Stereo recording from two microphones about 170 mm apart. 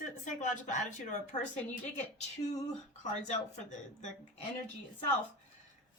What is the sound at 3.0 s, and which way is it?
Speech, 45° left (ahead or behind).